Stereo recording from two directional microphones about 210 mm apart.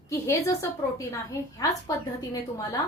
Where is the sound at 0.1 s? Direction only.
15° left (ahead or behind).